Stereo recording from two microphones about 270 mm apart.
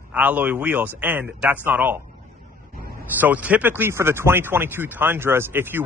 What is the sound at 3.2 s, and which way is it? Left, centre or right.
Speech, centre.